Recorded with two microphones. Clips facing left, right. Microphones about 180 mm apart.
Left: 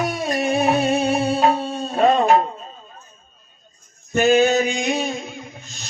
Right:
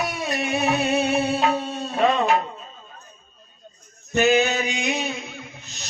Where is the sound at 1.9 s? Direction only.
40° left (ahead or behind).